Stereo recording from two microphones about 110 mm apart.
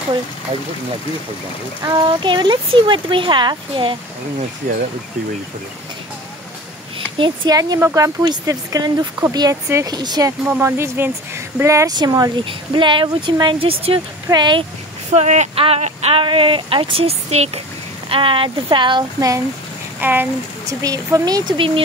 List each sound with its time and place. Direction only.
2.0 s speech: 45° right (ahead or behind)
7.2 s speech: 40° right (ahead or behind)
10.6 s speech: 25° right (ahead or behind)
11.9 s speech: 35° right (ahead or behind)
12.4 s speech: 50° right (ahead or behind)
14.3 s speech: 45° right (ahead or behind)
15.1 s speech: 90° right; by 17.5 s 70° right (ahead or behind)
18.1 s speech: 55° right (ahead or behind)
19.1 s speech: 30° right (ahead or behind)
20.0 s speech: 15° right (ahead or behind)
20.6 s speech: 30° right (ahead or behind)
21.5 s speech: 50° right (ahead or behind)